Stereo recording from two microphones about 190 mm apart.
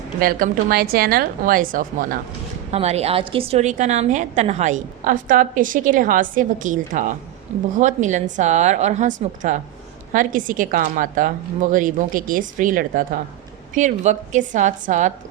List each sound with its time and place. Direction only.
0.2 s a woman's voice: 50° right (ahead or behind)
2.7 s a woman's voice: 35° right (ahead or behind)